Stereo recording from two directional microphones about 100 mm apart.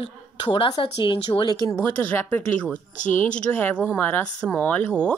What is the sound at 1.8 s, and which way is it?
Speech, 15° left (ahead or behind).